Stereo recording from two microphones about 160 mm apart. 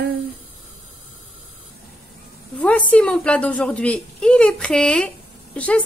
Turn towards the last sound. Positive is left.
turn(degrees=10)  # may be behind; listen again after turning